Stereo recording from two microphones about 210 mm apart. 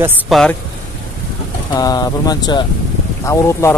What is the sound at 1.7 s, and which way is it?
Speech, 20° left (ahead or behind).